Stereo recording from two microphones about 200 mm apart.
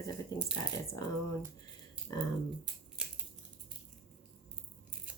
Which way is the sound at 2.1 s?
15° left (ahead or behind).